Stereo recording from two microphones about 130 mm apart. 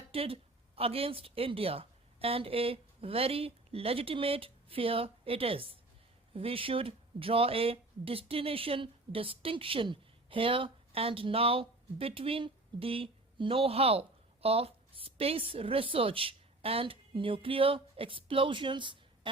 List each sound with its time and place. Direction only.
0.1 s a woman's voice: 45° right (ahead or behind)